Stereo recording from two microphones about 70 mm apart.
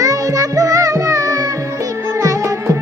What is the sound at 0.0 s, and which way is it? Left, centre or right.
Music, right.